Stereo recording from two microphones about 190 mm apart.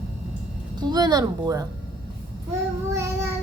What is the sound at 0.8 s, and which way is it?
Speech, 20° right (ahead or behind).